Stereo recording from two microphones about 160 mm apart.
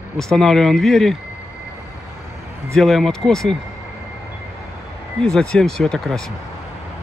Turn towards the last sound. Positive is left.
turn(degrees=0)  # may be behind; listen again after turning